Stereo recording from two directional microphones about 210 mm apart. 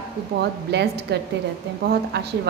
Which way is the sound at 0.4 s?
55° right (ahead or behind).